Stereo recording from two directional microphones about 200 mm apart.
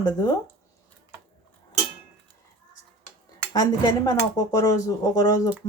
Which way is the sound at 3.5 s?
20° left (ahead or behind).